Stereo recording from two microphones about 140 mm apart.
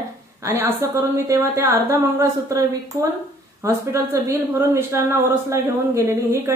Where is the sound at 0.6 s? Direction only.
20° right (ahead or behind).